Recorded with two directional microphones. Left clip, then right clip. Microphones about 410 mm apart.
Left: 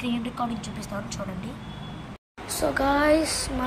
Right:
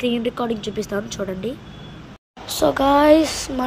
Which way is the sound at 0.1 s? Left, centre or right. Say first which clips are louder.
Right 7 dB; centre.